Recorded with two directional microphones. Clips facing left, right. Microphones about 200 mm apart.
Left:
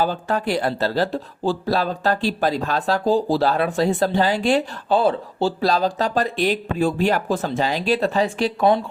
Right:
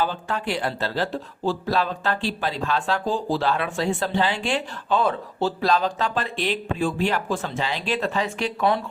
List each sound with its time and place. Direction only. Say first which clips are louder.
0.0 s speech: left 4 dB; 40° left (ahead or behind)